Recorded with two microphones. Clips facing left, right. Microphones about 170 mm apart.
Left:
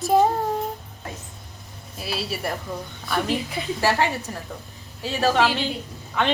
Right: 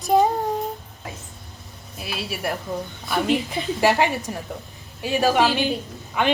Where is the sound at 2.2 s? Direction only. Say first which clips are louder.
Right 1 dB; 5° right (ahead or behind).